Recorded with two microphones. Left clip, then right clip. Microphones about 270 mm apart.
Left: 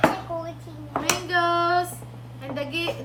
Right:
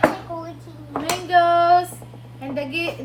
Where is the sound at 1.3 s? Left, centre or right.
Centre.